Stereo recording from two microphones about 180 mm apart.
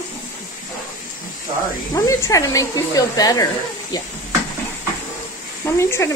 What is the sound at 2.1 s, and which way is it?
A woman's voice, 15° left (ahead or behind).